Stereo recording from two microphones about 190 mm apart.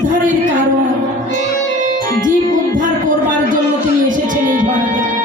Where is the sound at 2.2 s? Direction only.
45° right (ahead or behind).